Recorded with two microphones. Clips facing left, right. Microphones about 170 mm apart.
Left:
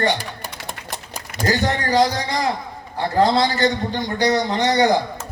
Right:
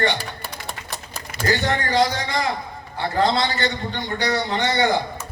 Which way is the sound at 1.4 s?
35° left (ahead or behind).